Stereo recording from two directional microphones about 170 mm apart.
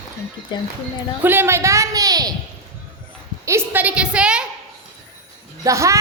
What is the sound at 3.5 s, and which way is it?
Speech, 10° right (ahead or behind).